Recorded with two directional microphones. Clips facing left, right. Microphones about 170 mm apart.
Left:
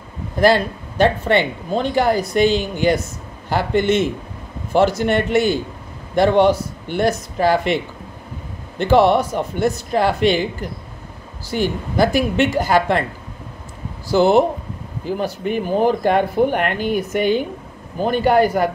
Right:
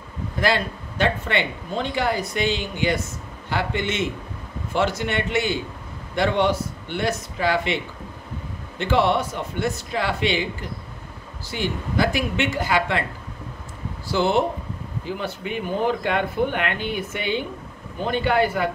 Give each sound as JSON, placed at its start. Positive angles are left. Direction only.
{"t": 0.4, "sound": "speech", "side_deg": 40}
{"t": 11.5, "sound": "speech", "side_deg": 40}
{"t": 14.0, "sound": "speech", "side_deg": 40}